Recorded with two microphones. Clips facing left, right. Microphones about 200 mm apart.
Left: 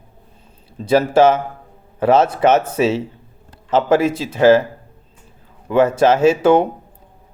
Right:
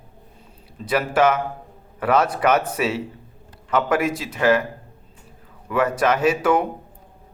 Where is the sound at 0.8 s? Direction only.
25° left (ahead or behind).